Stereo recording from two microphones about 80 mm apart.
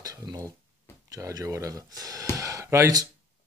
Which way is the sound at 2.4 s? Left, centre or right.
Right.